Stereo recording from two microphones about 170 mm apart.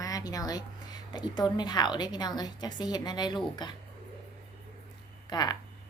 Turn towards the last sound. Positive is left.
turn(degrees=25)  # may be behind; listen again after turning